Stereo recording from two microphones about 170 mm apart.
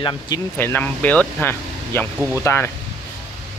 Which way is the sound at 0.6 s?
10° left (ahead or behind).